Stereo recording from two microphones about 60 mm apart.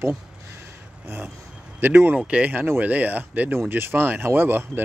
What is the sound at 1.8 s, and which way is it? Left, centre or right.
Speech, right.